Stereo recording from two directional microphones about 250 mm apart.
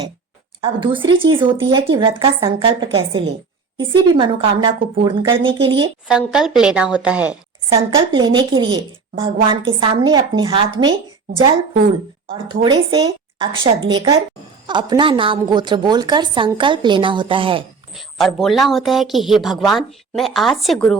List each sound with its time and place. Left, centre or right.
0.6 s a woman's voice: centre
6.1 s speech: centre
7.7 s a woman's voice: right
17.9 s speech: centre